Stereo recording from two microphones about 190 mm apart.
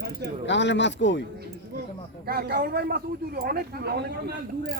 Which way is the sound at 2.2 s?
55° right (ahead or behind).